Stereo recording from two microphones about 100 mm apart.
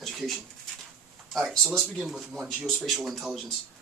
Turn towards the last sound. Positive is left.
turn(degrees=0)  # may be behind; listen again after turning